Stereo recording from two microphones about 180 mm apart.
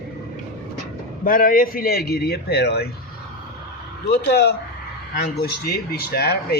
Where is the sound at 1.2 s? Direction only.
50° left (ahead or behind).